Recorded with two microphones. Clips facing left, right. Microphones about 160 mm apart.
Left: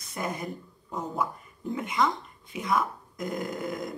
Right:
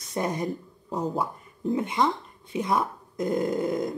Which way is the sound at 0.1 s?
30° right (ahead or behind).